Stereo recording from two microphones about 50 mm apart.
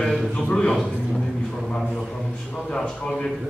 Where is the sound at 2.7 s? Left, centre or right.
Centre.